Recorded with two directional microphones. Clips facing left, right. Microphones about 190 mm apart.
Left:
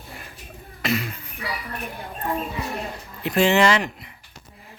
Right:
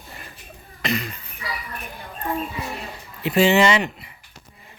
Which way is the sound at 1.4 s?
65° left (ahead or behind).